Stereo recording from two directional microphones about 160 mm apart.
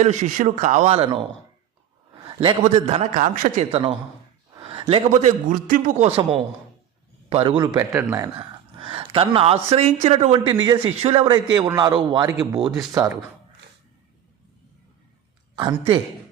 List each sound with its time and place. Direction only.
0.0 s speech: 50° right (ahead or behind)
2.2 s a sound: 30° right (ahead or behind)
2.6 s speech: 40° right (ahead or behind)
3.7 s a woman's voice: 30° right (ahead or behind)
4.5 s a sound: 30° right (ahead or behind)
5.2 s a man's voice: 55° right (ahead or behind); by 8.3 s 15° right (ahead or behind)
8.4 s speech: 35° right (ahead or behind)
11.3 s a man's voice: 25° right (ahead or behind)
15.5 s a woman's voice: 30° right (ahead or behind)